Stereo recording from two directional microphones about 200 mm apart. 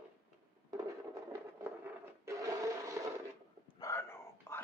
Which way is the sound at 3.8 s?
10° left (ahead or behind).